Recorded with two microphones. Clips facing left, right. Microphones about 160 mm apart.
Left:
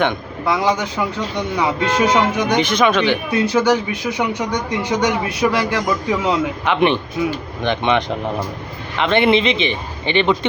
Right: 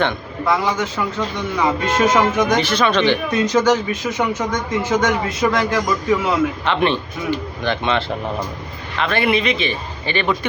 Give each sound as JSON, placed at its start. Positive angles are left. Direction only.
{"t": 0.0, "sound": "a man's voice", "side_deg": 15}